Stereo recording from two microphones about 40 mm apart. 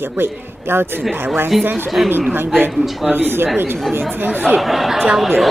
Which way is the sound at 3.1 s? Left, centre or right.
Right.